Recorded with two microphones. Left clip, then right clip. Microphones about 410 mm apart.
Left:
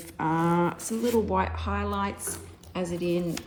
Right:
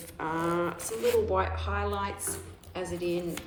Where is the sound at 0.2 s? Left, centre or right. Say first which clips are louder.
Left 4 dB; centre.